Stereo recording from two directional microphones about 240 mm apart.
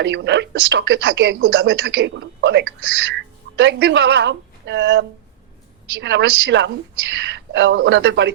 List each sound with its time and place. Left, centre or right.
0.0 s speech: right